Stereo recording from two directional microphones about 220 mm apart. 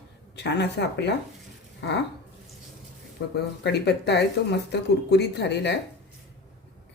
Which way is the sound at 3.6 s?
50° left (ahead or behind).